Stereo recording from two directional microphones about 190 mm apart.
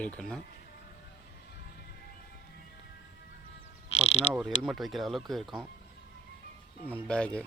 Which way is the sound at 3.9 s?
35° left (ahead or behind).